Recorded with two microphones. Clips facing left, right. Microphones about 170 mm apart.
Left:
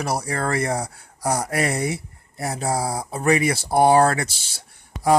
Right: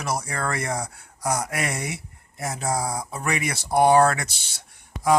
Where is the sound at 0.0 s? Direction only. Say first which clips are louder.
Left 3 dB; 35° left (ahead or behind).